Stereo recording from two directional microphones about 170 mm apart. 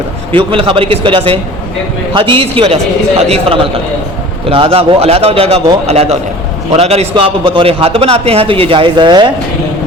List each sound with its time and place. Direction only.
0.3 s a man's voice: 35° right (ahead or behind)